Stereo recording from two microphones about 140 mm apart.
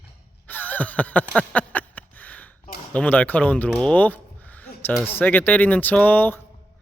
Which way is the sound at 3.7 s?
10° left (ahead or behind).